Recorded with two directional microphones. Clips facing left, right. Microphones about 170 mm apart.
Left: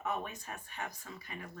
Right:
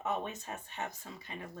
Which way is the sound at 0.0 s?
25° right (ahead or behind).